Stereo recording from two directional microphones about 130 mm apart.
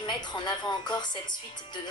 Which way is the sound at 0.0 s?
35° left (ahead or behind).